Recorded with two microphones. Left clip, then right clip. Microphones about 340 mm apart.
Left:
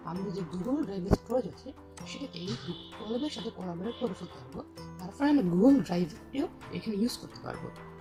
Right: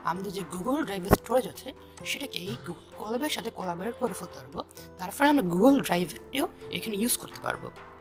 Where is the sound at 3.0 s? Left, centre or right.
Right.